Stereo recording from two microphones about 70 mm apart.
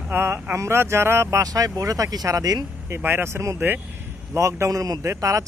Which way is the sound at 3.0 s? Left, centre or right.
Right.